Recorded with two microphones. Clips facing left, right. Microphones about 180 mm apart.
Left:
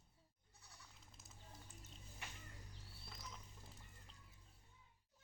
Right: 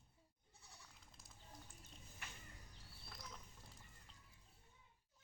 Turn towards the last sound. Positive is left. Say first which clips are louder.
# even
turn(degrees=0)  # may be behind; listen again after turning